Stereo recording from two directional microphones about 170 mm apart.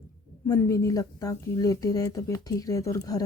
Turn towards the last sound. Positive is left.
turn(degrees=20)  # may be behind; listen again after turning